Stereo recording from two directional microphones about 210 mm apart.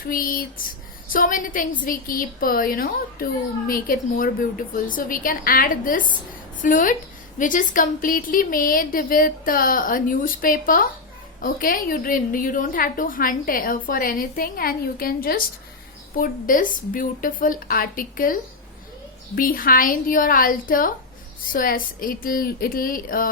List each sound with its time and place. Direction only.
0.0 s a woman's voice: 40° left (ahead or behind)
19.4 s a woman's voice: 40° left (ahead or behind)